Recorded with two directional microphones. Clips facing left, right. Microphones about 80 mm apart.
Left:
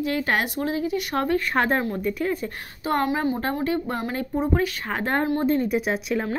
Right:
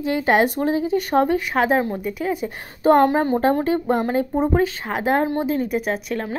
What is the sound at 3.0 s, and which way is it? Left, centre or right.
Speech, right.